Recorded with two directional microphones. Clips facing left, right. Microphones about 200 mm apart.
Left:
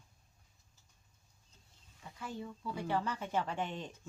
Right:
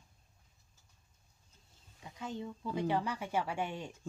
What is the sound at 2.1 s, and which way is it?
Speech, 20° right (ahead or behind).